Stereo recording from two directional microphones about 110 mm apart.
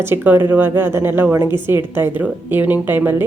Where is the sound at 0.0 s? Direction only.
20° right (ahead or behind).